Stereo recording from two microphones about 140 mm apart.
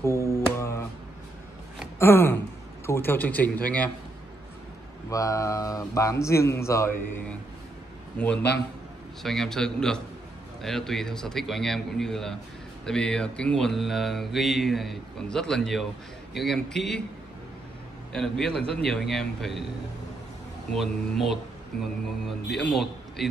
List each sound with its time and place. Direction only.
0.0 s music: 20° left (ahead or behind)
2.0 s gasp: 15° left (ahead or behind)
2.9 s a man's voice: 15° left (ahead or behind)
5.1 s a man's voice: 25° left (ahead or behind)
9.2 s mantra: 5° left (ahead or behind)
18.1 s mantra: 5° left (ahead or behind)
20.7 s mantra: centre (ahead or behind)
22.7 s a man's voice: centre (ahead or behind)